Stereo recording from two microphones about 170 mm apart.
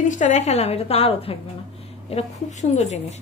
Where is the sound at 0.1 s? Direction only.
45° left (ahead or behind).